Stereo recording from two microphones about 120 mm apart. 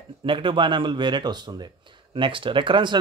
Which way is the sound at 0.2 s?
45° right (ahead or behind).